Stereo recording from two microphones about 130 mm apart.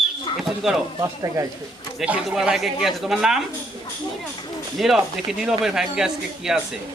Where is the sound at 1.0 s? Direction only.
25° right (ahead or behind).